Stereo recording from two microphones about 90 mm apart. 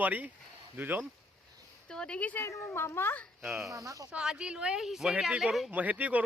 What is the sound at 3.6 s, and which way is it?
Speech, 35° right (ahead or behind).